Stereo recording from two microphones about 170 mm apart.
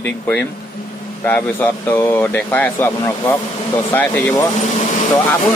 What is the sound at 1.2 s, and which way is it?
Speech, 10° left (ahead or behind).